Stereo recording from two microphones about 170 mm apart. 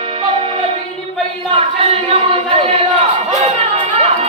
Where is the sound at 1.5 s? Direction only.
35° right (ahead or behind).